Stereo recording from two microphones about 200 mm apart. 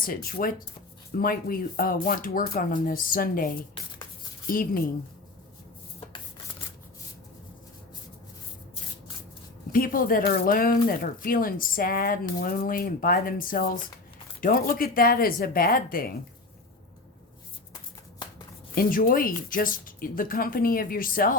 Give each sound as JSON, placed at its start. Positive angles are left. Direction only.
{"t": 0.0, "sound": "speech", "side_deg": 45}
{"t": 9.7, "sound": "speech", "side_deg": 45}
{"t": 18.7, "sound": "speech", "side_deg": 45}